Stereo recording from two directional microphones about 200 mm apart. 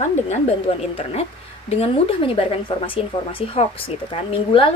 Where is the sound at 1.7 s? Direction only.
30° left (ahead or behind).